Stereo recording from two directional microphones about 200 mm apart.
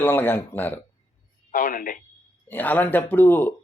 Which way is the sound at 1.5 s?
45° left (ahead or behind).